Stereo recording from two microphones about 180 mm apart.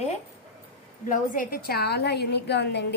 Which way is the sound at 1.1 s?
50° left (ahead or behind).